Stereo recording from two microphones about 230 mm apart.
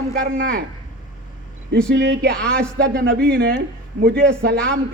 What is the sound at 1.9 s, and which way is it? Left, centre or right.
A man's voice, right.